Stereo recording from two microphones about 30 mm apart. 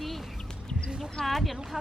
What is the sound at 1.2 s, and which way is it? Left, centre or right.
Speech, centre.